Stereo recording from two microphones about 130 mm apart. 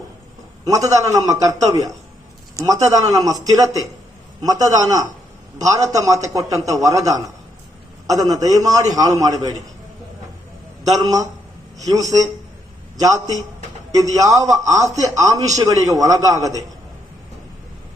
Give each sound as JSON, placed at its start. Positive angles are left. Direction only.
{"t": 0.7, "sound": "a man's voice", "side_deg": -25}
{"t": 3.0, "sound": "a man's voice", "side_deg": -25}
{"t": 10.8, "sound": "a man's voice", "side_deg": -30}